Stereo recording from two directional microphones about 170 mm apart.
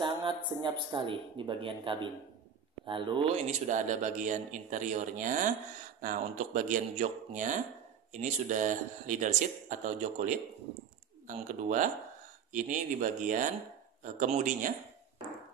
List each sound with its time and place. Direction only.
0.0 s speech: 30° right (ahead or behind)
3.4 s speech: 45° right (ahead or behind)